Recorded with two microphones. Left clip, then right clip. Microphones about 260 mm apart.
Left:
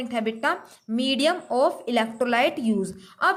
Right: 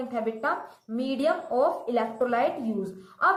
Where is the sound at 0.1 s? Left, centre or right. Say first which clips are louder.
Left 4 dB; left.